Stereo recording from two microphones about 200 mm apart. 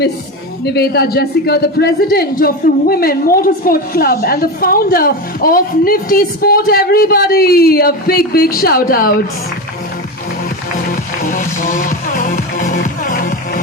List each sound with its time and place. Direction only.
0.6 s a woman's voice: 55° left (ahead or behind)
10.8 s music: 45° left (ahead or behind)